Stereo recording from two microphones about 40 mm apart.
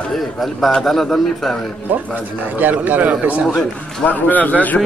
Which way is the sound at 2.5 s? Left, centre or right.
Right.